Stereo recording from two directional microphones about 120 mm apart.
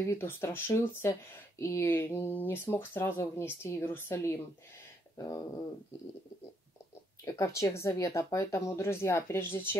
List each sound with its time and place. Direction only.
0.0 s speech: 25° left (ahead or behind)
7.2 s speech: 25° left (ahead or behind)